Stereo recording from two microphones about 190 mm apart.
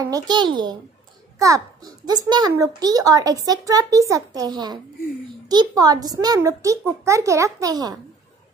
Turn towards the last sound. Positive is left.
turn(degrees=-20)  # may be behind; listen again after turning